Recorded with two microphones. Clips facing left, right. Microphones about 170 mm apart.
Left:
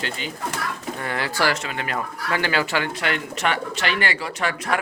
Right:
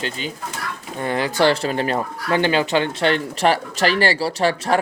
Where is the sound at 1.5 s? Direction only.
35° right (ahead or behind).